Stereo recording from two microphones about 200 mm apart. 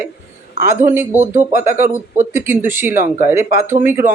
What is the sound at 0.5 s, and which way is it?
Speech, 40° right (ahead or behind).